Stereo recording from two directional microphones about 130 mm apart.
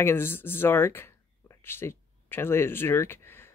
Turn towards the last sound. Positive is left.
turn(degrees=20)  # may be behind; listen again after turning